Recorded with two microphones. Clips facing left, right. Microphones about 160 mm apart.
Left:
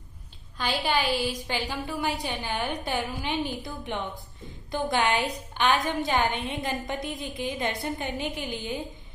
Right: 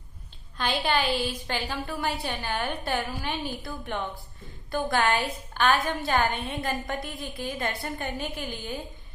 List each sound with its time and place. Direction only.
0.6 s a woman's voice: 10° left (ahead or behind)